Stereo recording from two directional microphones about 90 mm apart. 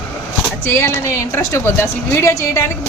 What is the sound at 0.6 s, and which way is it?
Speech, 30° left (ahead or behind).